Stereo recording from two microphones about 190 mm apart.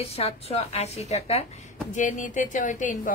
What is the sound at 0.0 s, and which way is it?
A woman's voice, 30° left (ahead or behind).